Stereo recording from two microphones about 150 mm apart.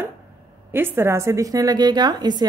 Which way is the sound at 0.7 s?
15° right (ahead or behind).